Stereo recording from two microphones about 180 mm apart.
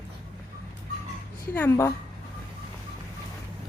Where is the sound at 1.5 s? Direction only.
10° left (ahead or behind).